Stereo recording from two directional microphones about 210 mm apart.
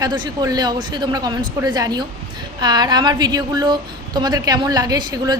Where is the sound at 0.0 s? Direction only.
20° right (ahead or behind).